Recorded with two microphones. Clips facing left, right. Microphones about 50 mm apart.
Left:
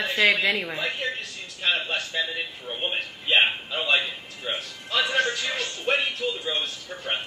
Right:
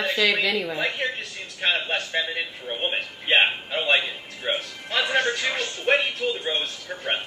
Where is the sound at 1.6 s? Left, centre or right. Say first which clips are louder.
Right 1 dB; right.